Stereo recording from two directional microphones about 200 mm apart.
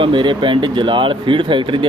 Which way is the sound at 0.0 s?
25° right (ahead or behind).